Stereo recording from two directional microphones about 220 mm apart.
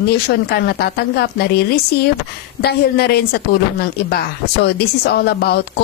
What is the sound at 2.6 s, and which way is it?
Speech, 45° left (ahead or behind).